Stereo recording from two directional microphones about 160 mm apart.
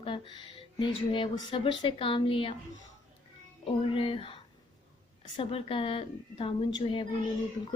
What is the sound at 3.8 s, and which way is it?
Speech, 35° left (ahead or behind).